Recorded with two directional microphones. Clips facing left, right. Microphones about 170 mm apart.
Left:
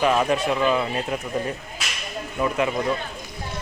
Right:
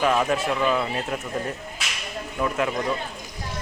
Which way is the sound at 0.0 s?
5° left (ahead or behind).